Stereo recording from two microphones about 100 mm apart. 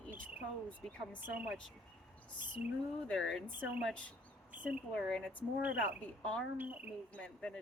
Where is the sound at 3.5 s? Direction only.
20° right (ahead or behind).